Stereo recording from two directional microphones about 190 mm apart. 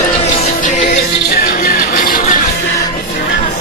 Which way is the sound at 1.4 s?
50° left (ahead or behind).